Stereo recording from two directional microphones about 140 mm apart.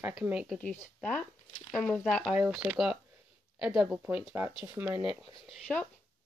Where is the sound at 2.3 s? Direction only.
5° right (ahead or behind).